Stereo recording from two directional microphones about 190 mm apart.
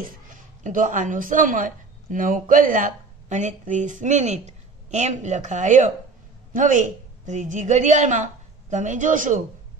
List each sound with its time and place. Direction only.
0.7 s a woman's voice: 40° right (ahead or behind)